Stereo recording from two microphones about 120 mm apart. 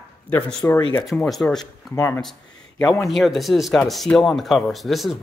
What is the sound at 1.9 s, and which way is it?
Speech, 20° left (ahead or behind).